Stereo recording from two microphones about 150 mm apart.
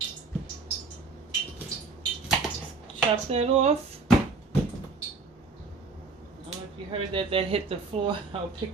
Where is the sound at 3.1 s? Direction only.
45° right (ahead or behind).